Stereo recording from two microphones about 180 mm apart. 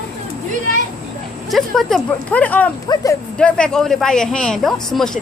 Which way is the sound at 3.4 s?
5° left (ahead or behind).